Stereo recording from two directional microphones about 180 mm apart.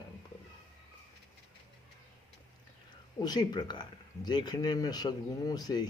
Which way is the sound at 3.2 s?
20° left (ahead or behind).